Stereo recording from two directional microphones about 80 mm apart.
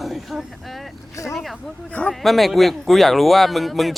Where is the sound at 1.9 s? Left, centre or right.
Centre.